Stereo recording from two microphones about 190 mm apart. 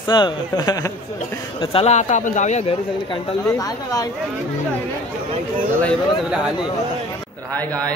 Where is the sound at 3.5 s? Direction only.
20° left (ahead or behind).